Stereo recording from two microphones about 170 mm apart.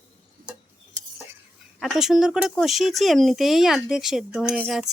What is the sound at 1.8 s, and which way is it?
Speech, centre (ahead or behind).